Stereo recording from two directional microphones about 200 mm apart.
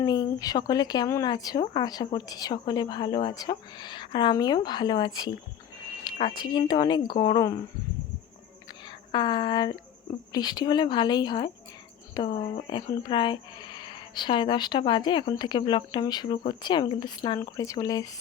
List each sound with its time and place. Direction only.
0.0 s speech: 20° left (ahead or behind)
8.9 s a woman's voice: 20° left (ahead or behind)